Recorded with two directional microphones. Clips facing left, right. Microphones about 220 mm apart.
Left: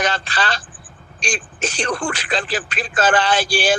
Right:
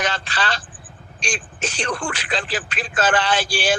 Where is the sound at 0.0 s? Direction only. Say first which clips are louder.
Left 3 dB; 40° left (ahead or behind).